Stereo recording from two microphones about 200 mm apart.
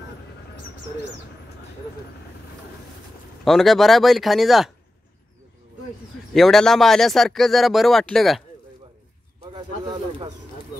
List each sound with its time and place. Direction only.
3.4 s speech: centre (ahead or behind)
6.3 s speech: centre (ahead or behind)
9.4 s snake: 25° right (ahead or behind)